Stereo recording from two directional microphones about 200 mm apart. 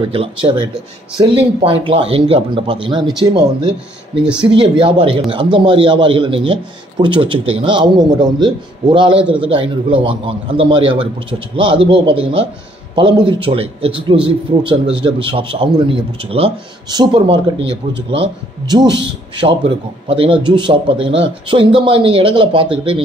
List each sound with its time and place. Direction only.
0.1 s a man's voice: 30° right (ahead or behind)
17.6 s speech: 65° right (ahead or behind)
18.1 s a man's voice: 25° right (ahead or behind)
20.1 s a man's voice: 25° right (ahead or behind)